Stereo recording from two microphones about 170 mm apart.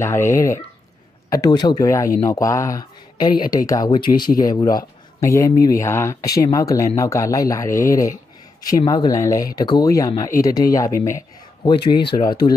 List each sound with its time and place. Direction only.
0.0 s speech: 15° left (ahead or behind)